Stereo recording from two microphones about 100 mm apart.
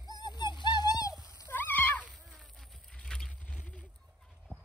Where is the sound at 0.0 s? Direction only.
40° left (ahead or behind).